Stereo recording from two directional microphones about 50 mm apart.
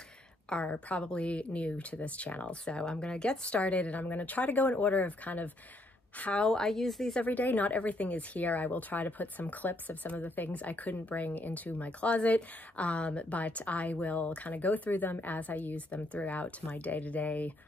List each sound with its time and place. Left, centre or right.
0.5 s speech: left
6.4 s speech: centre
7.2 s speech: left